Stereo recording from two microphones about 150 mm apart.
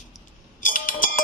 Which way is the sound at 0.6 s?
65° left (ahead or behind).